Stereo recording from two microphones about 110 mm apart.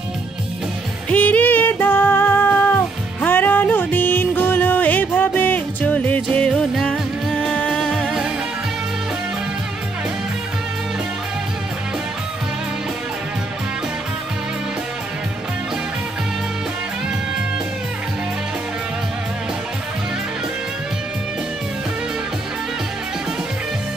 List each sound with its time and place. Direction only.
1.1 s music: 15° left (ahead or behind)